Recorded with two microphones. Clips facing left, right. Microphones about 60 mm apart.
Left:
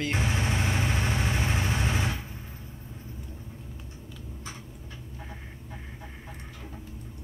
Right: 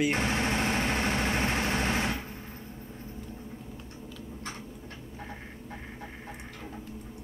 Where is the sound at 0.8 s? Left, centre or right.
Right.